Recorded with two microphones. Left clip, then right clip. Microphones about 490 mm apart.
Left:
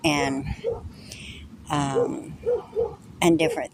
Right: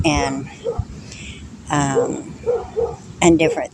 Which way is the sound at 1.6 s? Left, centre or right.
Left.